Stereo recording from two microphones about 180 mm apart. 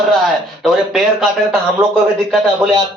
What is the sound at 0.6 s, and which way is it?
Speech, centre (ahead or behind).